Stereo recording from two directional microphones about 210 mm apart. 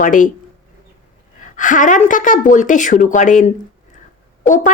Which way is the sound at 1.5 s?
35° left (ahead or behind).